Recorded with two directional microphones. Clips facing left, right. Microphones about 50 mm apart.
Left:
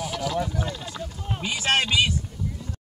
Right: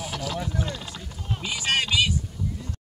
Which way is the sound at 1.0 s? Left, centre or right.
Centre.